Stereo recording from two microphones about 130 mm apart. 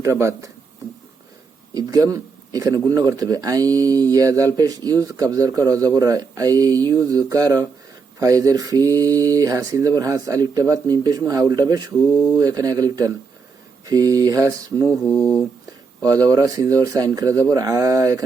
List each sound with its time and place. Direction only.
0.0 s a man's voice: 20° right (ahead or behind)
1.7 s a man's voice: 25° right (ahead or behind)
14.8 s mantra: 15° left (ahead or behind)
16.0 s a man's voice: 30° right (ahead or behind)